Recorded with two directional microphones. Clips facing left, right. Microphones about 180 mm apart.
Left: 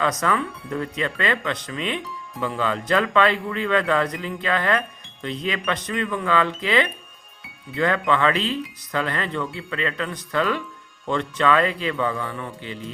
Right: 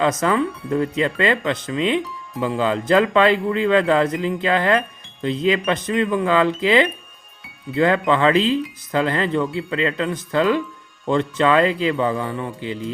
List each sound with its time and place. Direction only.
0.0 s speech: 25° right (ahead or behind)